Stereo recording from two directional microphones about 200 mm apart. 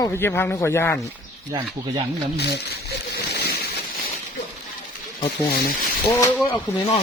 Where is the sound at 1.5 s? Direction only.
25° right (ahead or behind).